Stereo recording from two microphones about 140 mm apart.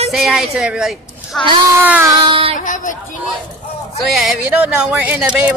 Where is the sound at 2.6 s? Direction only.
65° left (ahead or behind).